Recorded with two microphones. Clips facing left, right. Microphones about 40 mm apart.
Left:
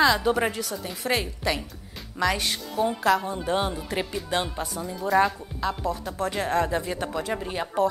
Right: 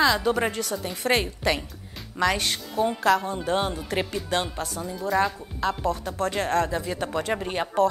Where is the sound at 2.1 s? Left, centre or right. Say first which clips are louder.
Right 1 dB; centre.